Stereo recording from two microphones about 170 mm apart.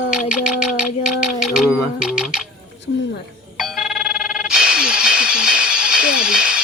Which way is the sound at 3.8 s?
5° right (ahead or behind).